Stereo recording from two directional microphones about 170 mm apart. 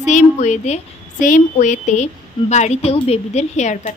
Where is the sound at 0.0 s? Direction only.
45° left (ahead or behind).